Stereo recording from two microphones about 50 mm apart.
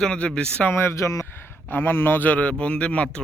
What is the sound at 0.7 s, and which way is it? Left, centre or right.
Speech, left.